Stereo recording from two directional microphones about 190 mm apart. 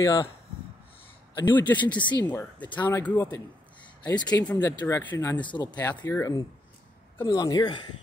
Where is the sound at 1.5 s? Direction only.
10° left (ahead or behind).